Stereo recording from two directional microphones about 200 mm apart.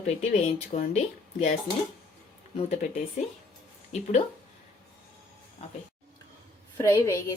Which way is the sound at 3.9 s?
35° left (ahead or behind).